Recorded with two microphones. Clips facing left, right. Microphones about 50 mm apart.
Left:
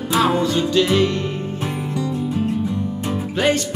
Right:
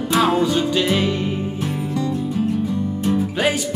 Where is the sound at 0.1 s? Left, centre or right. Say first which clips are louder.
Even; centre.